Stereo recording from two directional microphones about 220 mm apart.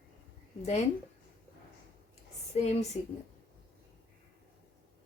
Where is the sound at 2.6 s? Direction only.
30° left (ahead or behind).